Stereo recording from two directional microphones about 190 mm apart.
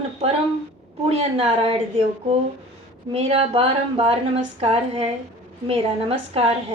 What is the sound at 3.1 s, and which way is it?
A woman's voice, 30° right (ahead or behind).